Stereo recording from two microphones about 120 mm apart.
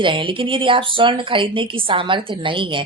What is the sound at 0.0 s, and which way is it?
Speech, 45° right (ahead or behind).